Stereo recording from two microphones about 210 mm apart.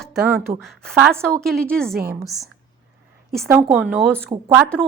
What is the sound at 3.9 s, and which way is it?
Speech, 5° left (ahead or behind).